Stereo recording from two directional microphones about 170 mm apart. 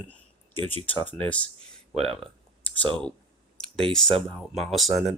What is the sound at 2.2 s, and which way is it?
Clicking, 10° left (ahead or behind).